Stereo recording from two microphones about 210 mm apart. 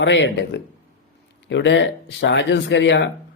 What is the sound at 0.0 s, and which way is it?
A man's voice, 60° left (ahead or behind).